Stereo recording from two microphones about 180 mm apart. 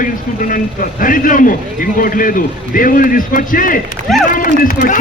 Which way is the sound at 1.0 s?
50° left (ahead or behind).